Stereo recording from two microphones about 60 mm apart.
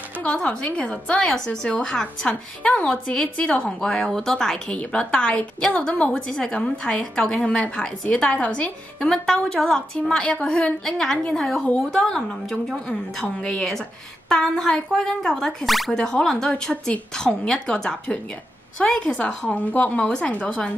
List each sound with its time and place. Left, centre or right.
0.2 s a woman's voice: left
3.8 s a woman's voice: centre
4.7 s a woman's voice: centre
9.1 s a woman's voice: centre
15.9 s a woman's voice: centre